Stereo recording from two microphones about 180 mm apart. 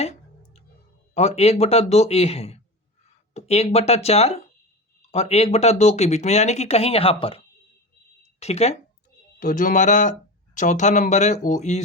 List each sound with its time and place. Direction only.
0.0 s clicking: 35° left (ahead or behind)
1.1 s speech: 35° left (ahead or behind)
9.4 s speech: 50° left (ahead or behind)